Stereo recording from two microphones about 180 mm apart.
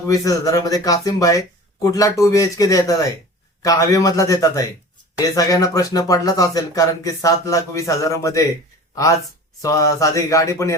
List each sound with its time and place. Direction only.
0.1 s speech: 20° left (ahead or behind)
9.6 s speech: 20° left (ahead or behind)